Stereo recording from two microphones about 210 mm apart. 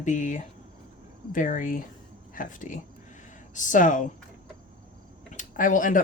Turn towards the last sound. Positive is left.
turn(degrees=40)  # may be behind; listen again after turning